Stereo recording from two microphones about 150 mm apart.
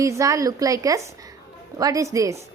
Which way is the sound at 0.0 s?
20° right (ahead or behind).